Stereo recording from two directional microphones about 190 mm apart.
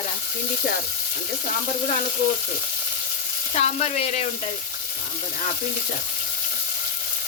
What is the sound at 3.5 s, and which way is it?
Frying, 35° left (ahead or behind).